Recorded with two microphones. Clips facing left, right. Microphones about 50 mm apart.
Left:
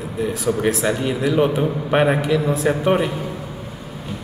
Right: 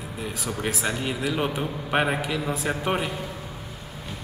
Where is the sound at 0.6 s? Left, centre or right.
Centre.